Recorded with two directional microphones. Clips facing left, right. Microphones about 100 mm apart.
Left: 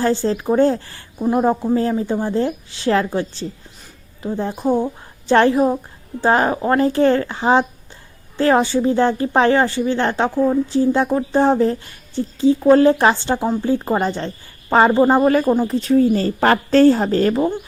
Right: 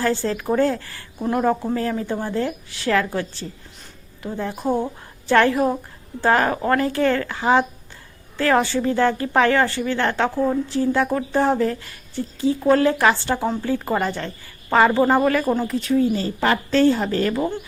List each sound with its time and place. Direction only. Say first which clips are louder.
0.0 s a woman's voice: left 4 dB; 25° left (ahead or behind)